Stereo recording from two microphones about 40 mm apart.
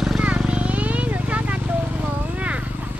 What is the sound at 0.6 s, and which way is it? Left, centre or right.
Vehicle, right.